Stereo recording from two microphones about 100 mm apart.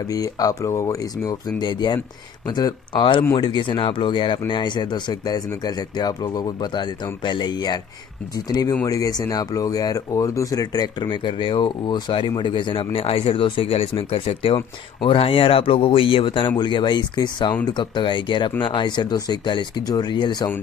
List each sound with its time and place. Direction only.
0.1 s speech: 35° left (ahead or behind)
1.7 s speech: 50° left (ahead or behind)